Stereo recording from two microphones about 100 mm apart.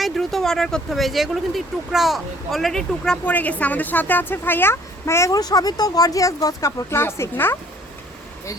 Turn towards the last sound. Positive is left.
turn(degrees=25)  # may be behind; listen again after turning